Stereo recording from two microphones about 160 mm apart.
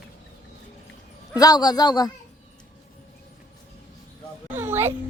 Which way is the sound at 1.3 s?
25° left (ahead or behind).